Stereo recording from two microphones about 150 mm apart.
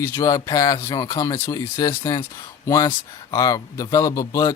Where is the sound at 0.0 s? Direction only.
25° left (ahead or behind).